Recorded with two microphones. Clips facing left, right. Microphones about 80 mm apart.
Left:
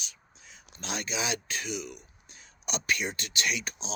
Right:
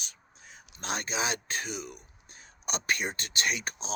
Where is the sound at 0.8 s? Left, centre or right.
Right.